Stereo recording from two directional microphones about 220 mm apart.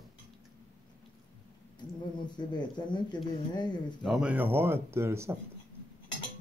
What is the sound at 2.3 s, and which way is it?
Speech, 20° left (ahead or behind).